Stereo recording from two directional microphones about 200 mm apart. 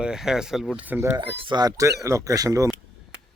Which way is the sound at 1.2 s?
25° right (ahead or behind).